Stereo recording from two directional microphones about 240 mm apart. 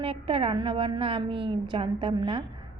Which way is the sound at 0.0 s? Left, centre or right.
Right.